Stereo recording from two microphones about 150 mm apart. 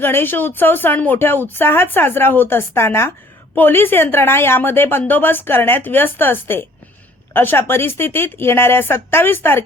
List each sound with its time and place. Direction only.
0.0 s a woman's voice: 15° left (ahead or behind)